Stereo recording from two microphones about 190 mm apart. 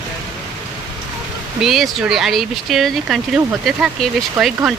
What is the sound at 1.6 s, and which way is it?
Speech, centre (ahead or behind).